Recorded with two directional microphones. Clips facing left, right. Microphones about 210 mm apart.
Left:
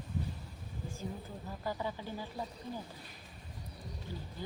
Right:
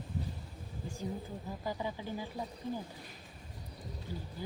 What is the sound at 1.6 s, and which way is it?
Speech, 15° right (ahead or behind).